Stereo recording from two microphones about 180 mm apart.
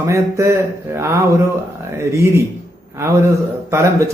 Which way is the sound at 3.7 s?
15° right (ahead or behind).